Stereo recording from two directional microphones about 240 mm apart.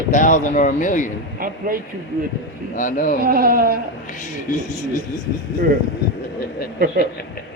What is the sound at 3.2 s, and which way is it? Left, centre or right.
Speech, right.